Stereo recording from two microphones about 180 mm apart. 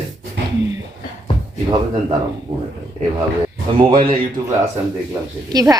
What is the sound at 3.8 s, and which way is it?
Speech, 30° right (ahead or behind).